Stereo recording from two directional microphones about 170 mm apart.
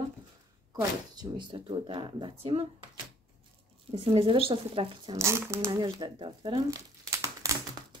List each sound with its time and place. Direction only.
1.1 s speech: 25° right (ahead or behind)
3.9 s a woman's voice: 30° right (ahead or behind)
5.1 s speech: 15° right (ahead or behind)